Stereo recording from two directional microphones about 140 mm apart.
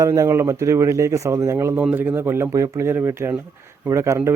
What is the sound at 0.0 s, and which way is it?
Speech, 25° right (ahead or behind).